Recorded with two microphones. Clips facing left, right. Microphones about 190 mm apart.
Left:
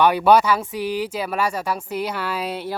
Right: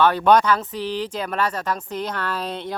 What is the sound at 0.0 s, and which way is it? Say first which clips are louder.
Speech: left 1 dB; 10° left (ahead or behind).